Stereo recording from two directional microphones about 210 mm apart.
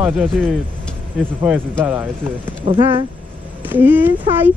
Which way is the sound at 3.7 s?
10° right (ahead or behind).